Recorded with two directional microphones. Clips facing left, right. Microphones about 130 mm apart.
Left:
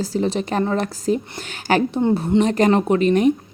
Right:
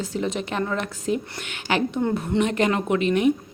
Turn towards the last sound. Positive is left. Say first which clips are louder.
# left 4 dB
turn(degrees=40)  # may be behind; listen again after turning